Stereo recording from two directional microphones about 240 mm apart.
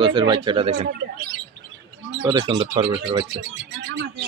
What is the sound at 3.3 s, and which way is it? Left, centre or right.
Speech, right.